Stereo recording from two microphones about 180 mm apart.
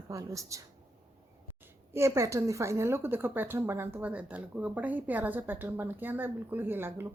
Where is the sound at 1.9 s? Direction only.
15° right (ahead or behind).